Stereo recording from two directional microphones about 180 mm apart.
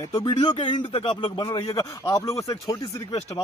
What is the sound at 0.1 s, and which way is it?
Speech, 25° left (ahead or behind).